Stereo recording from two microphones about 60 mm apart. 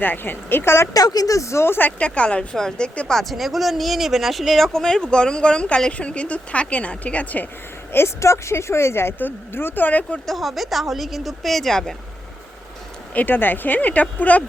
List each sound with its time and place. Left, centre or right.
0.0 s speech: left
0.9 s a woman's voice: left
2.0 s speech: centre
3.1 s speech: centre; by 7.4 s left
7.9 s speech: left
10.2 s speech: centre
13.1 s speech: left